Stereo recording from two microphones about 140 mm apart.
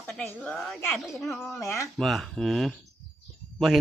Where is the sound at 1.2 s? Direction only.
20° left (ahead or behind).